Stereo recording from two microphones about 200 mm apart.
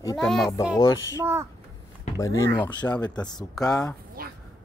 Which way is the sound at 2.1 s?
15° left (ahead or behind).